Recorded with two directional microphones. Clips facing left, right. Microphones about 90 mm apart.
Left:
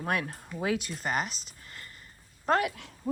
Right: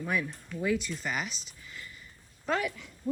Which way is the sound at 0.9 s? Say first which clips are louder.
Left 3 dB; 50° left (ahead or behind).